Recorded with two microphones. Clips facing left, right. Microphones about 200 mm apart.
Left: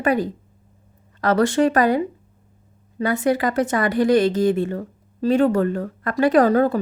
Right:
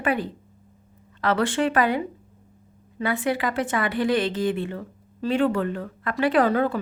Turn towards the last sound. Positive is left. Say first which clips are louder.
# left 5 dB
turn(degrees=40)  # may be behind; listen again after turning